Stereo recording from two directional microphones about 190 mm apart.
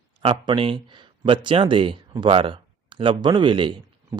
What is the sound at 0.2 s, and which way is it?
Speech, 30° right (ahead or behind).